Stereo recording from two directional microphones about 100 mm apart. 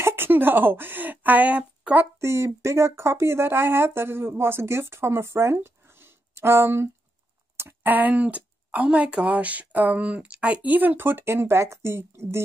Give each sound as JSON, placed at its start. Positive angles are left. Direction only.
{"t": 0.0, "sound": "speech", "side_deg": -25}
{"t": 2.1, "sound": "speech", "side_deg": -25}